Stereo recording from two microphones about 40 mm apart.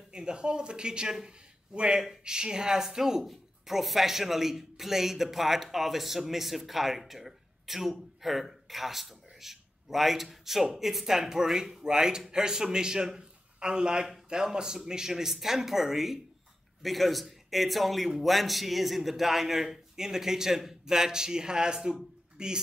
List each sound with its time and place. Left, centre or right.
0.1 s a man's voice: right